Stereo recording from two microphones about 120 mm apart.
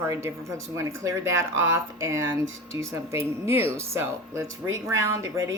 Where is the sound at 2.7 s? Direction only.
25° right (ahead or behind).